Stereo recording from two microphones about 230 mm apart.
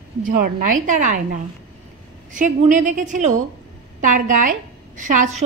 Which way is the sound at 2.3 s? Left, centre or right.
Right.